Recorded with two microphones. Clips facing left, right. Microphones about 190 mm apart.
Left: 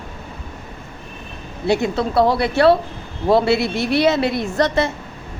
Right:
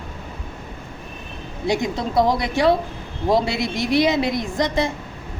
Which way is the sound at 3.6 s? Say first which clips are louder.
Left 2 dB; 15° right (ahead or behind).